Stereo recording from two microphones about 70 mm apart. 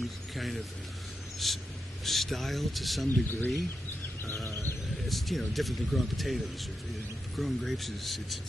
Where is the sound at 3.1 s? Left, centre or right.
Left.